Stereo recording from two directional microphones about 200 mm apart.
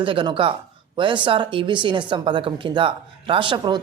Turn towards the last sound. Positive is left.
turn(degrees=-20)  # may be behind; listen again after turning